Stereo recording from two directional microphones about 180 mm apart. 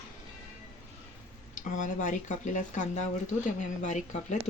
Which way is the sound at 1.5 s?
45° left (ahead or behind).